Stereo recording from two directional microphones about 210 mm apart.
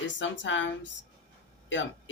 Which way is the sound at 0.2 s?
60° left (ahead or behind).